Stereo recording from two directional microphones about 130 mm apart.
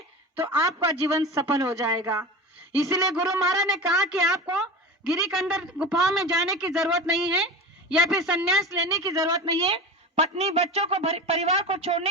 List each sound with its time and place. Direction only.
0.4 s speech: 25° right (ahead or behind)
3.8 s a woman's voice: centre (ahead or behind)
8.8 s speech: 25° right (ahead or behind)
9.6 s a woman's voice: 50° right (ahead or behind)